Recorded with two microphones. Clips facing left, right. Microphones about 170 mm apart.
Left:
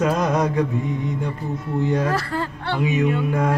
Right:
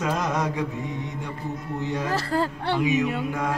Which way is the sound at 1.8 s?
55° left (ahead or behind).